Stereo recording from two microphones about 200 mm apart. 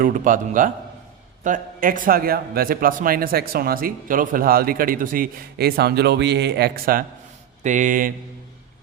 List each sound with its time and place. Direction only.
0.0 s a man's voice: 40° right (ahead or behind)